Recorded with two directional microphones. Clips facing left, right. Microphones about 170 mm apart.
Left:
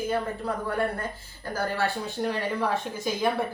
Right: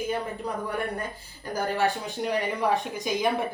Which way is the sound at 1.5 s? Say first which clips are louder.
Right 2 dB; 15° right (ahead or behind).